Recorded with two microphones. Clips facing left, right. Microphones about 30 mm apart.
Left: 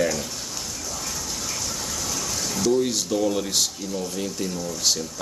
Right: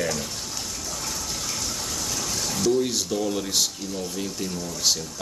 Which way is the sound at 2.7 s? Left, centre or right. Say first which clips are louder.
Left 2 dB; centre.